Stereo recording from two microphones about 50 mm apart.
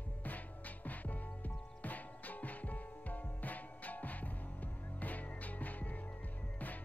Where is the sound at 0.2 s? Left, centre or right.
Left.